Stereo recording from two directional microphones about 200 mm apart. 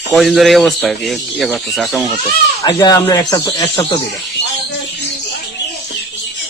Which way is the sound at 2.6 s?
20° left (ahead or behind).